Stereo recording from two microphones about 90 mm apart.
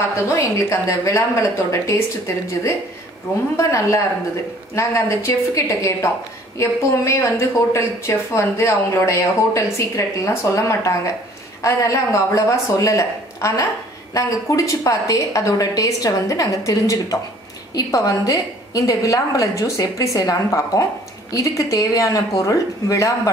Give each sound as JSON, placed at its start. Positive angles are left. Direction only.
{"t": 0.1, "sound": "a woman's voice", "side_deg": 35}